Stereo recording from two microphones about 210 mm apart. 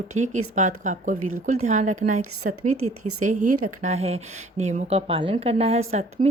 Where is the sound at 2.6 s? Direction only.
90° right.